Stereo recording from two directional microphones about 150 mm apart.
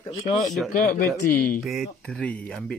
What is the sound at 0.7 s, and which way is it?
Speech, 75° left (ahead or behind).